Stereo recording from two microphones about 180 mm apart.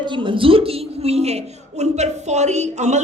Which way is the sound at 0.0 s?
25° right (ahead or behind).